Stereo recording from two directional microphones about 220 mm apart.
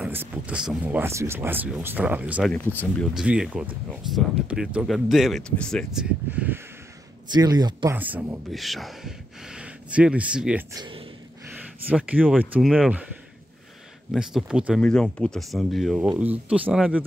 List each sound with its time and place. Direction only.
0.0 s speech: 10° right (ahead or behind)
2.5 s speech: 10° left (ahead or behind)
3.2 s speech: 5° right (ahead or behind)
7.2 s speech: 20° right (ahead or behind)
10.7 s speech: 20° right (ahead or behind)
11.9 s speech: 5° right (ahead or behind)
14.1 s speech: centre (ahead or behind)